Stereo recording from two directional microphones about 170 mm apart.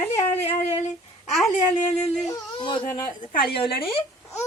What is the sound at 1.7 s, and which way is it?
Speech, 40° left (ahead or behind).